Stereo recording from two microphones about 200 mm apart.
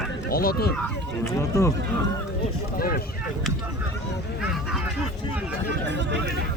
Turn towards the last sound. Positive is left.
turn(degrees=-60)  # may be behind; listen again after turning